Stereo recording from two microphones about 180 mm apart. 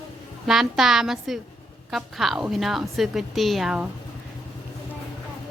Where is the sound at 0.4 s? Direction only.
5° right (ahead or behind).